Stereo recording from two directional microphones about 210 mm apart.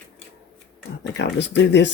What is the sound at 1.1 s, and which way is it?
Speech, 55° left (ahead or behind).